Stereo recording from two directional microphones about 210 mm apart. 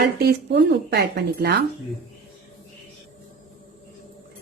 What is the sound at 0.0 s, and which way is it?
A woman's voice, 50° right (ahead or behind).